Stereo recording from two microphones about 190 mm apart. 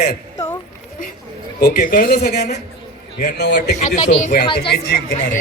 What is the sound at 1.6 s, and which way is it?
Speech, 55° left (ahead or behind).